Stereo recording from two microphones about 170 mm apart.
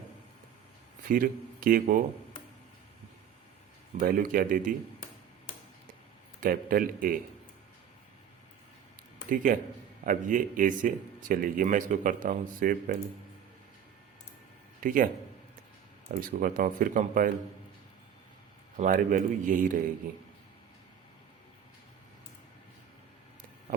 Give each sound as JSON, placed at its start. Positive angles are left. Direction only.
{"t": 1.0, "sound": "speech", "side_deg": -55}
{"t": 4.0, "sound": "speech", "side_deg": -55}
{"t": 6.4, "sound": "speech", "side_deg": -55}
{"t": 9.3, "sound": "speech", "side_deg": -55}
{"t": 14.8, "sound": "a man's voice", "side_deg": -55}
{"t": 16.1, "sound": "speech", "side_deg": -50}
{"t": 18.8, "sound": "speech", "side_deg": -55}